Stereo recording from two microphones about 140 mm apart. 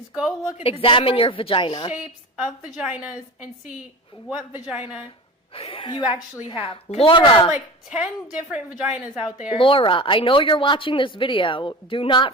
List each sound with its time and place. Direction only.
0.1 s a woman's voice: 5° right (ahead or behind)
0.6 s a woman's voice: 40° left (ahead or behind)
2.7 s a woman's voice: 10° right (ahead or behind)
5.5 s a woman's voice: 40° left (ahead or behind)
7.5 s a woman's voice: 10° right (ahead or behind)
9.6 s a woman's voice: 40° left (ahead or behind)